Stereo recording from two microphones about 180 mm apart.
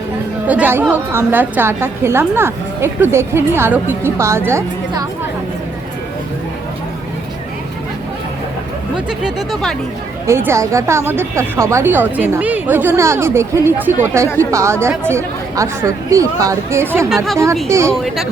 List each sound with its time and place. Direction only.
0.4 s a woman's voice: 10° right (ahead or behind)
9.0 s speech: centre (ahead or behind)
10.2 s a woman's voice: 15° right (ahead or behind)